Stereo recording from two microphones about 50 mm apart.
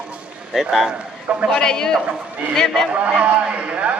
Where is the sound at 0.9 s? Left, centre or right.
Right.